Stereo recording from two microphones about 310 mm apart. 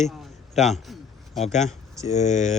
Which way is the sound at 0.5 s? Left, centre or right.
Centre.